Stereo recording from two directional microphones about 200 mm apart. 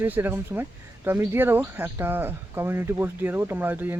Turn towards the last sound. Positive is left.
turn(degrees=-10)  # may be behind; listen again after turning